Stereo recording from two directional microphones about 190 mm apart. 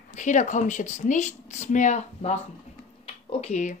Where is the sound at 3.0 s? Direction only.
35° left (ahead or behind).